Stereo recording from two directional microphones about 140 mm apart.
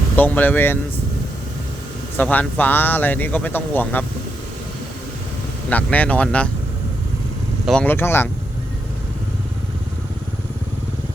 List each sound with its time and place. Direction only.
0.2 s speech: 15° left (ahead or behind)
2.1 s speech: 10° left (ahead or behind)
5.6 s speech: 10° left (ahead or behind)
7.7 s speech: 10° left (ahead or behind)